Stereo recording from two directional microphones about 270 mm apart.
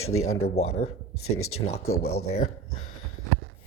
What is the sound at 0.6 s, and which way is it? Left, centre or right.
Speech, left.